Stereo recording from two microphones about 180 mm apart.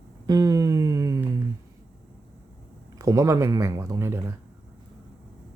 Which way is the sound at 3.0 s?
20° right (ahead or behind).